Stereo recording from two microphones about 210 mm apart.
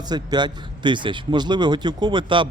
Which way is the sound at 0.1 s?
20° right (ahead or behind).